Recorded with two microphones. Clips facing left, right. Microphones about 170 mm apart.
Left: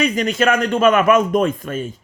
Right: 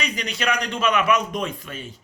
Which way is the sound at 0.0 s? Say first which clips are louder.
Left 10 dB; 50° left (ahead or behind).